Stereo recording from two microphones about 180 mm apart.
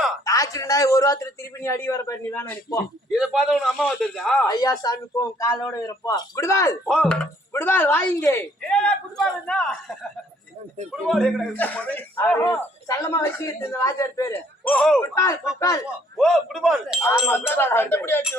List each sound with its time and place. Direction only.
0.3 s a man's voice: 20° left (ahead or behind)
3.1 s speech: centre (ahead or behind)
4.4 s a man's voice: 20° left (ahead or behind)
6.8 s a man's voice: centre (ahead or behind); by 14.7 s 15° left (ahead or behind)
14.7 s speech: 5° left (ahead or behind)
15.1 s a man's voice: 15° left (ahead or behind)
16.1 s speech: centre (ahead or behind)
17.5 s a man's voice: 10° left (ahead or behind)